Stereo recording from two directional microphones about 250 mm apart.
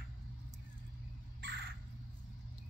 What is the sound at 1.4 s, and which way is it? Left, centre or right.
Crow, right.